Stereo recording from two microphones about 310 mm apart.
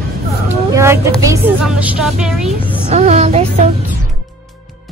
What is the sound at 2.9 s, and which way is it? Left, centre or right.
Music, right.